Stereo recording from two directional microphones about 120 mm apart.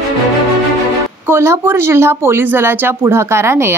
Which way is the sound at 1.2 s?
20° right (ahead or behind).